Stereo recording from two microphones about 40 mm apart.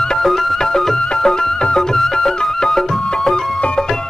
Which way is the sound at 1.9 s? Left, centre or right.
Centre.